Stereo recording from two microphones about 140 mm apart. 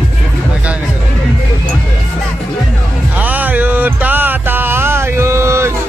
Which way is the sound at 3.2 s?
10° right (ahead or behind).